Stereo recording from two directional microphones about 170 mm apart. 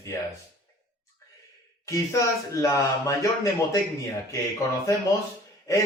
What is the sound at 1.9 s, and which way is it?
Speech, 20° left (ahead or behind).